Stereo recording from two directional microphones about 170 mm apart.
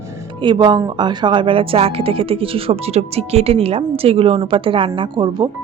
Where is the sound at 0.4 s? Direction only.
25° right (ahead or behind).